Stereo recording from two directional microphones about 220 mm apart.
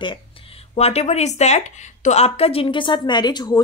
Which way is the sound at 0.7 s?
30° left (ahead or behind).